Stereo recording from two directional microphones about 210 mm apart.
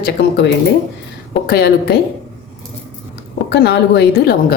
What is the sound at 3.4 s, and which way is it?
A woman's voice, 55° left (ahead or behind).